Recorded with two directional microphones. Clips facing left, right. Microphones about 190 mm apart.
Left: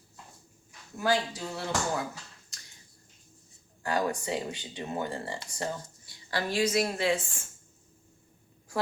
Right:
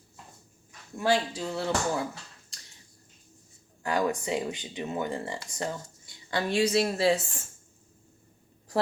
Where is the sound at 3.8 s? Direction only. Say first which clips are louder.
Right 2 dB; 20° right (ahead or behind).